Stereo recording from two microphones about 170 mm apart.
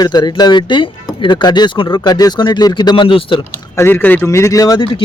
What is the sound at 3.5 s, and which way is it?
Speech, 15° left (ahead or behind).